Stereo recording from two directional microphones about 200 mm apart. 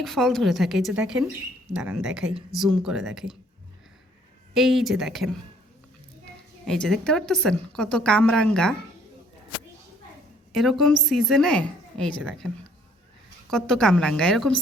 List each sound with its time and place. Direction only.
0.0 s speech: centre (ahead or behind)
4.5 s speech: centre (ahead or behind)
6.7 s speech: 5° left (ahead or behind)
10.5 s speech: centre (ahead or behind)
13.5 s speech: 5° left (ahead or behind)